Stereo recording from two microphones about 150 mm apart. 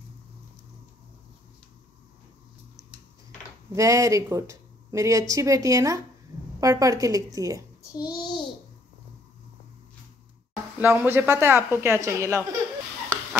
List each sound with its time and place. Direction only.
3.7 s a woman's voice: 20° right (ahead or behind)
7.9 s a child's voice: 25° left (ahead or behind)
10.8 s speech: 10° right (ahead or behind)